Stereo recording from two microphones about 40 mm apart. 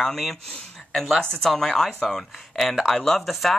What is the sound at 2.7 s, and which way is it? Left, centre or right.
Speech, centre.